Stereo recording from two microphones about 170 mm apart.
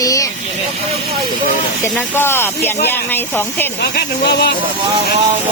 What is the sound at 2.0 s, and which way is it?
Speech, 15° left (ahead or behind).